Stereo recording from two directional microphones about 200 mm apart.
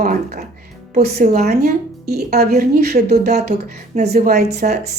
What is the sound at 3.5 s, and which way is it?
Speech, 35° right (ahead or behind).